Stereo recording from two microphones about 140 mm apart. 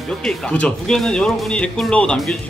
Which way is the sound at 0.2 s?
10° left (ahead or behind).